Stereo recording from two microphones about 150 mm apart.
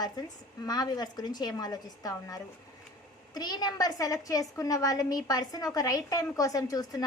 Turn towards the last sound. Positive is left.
turn(degrees=25)  # may be behind; listen again after turning